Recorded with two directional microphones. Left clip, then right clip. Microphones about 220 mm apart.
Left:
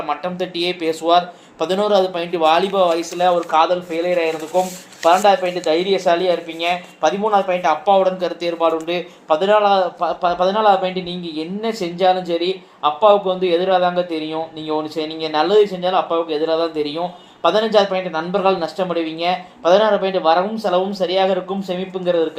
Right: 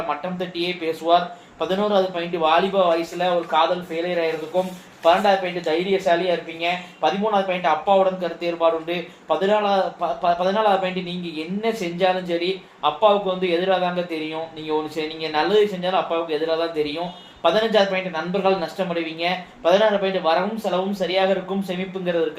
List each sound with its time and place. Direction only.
0.1 s speech: 45° left (ahead or behind)
5.0 s speech: 35° left (ahead or behind)